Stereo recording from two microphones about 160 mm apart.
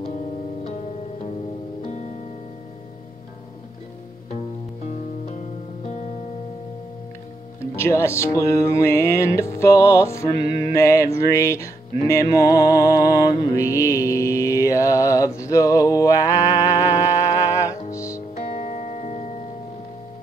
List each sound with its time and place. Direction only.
1.9 s music: 50° left (ahead or behind)
7.7 s music: 15° left (ahead or behind)
18.4 s music: 50° left (ahead or behind)